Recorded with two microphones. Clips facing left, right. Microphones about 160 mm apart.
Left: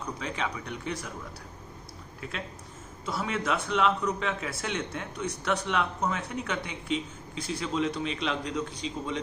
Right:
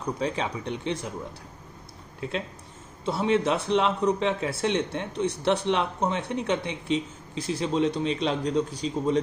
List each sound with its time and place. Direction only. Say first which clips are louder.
0.0 s a man's voice: right 5 dB; 35° right (ahead or behind)
2.2 s a man's voice: right 7 dB; 30° right (ahead or behind)